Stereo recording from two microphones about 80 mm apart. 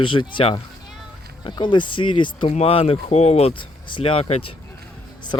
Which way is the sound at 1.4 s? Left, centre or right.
Left.